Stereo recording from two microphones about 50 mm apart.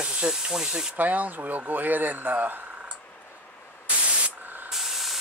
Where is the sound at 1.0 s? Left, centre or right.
Right.